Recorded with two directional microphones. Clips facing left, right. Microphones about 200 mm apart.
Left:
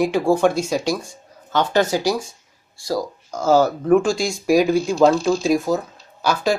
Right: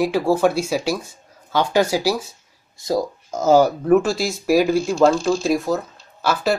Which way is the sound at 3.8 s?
5° right (ahead or behind).